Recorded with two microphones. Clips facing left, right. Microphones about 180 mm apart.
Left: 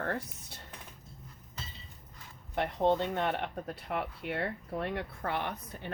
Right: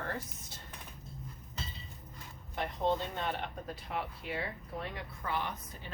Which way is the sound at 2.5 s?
60° left (ahead or behind).